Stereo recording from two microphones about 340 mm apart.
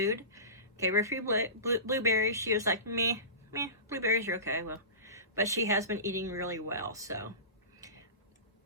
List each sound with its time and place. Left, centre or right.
0.0 s speech: centre
7.8 s tick-tock: centre